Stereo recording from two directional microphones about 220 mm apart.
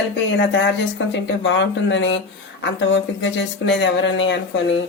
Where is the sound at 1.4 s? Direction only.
55° left (ahead or behind).